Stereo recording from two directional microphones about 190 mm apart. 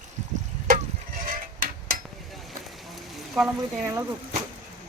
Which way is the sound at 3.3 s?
10° right (ahead or behind).